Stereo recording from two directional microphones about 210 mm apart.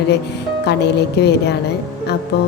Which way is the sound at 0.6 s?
55° left (ahead or behind).